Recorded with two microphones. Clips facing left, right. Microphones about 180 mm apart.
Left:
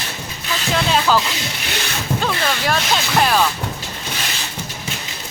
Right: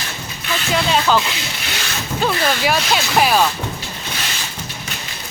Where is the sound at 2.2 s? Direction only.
5° right (ahead or behind).